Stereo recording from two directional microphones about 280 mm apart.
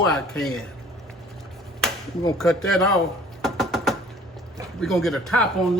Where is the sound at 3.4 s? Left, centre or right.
Centre.